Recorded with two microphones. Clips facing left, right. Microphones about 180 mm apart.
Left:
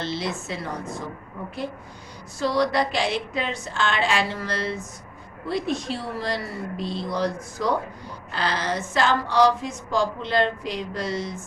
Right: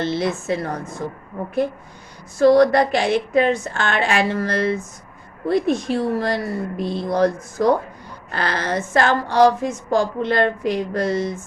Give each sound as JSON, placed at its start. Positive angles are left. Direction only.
{"t": 0.0, "sound": "a woman's voice", "side_deg": -50}
{"t": 2.4, "sound": "a woman's voice", "side_deg": -50}